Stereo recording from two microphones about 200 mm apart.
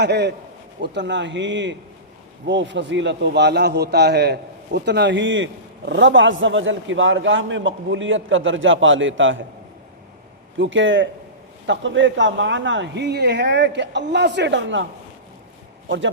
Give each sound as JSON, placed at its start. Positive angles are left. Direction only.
{"t": 0.0, "sound": "a man's voice", "side_deg": -55}
{"t": 10.6, "sound": "a man's voice", "side_deg": -70}